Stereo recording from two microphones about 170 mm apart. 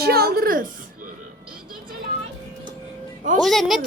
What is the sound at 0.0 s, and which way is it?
Speech, 65° right (ahead or behind).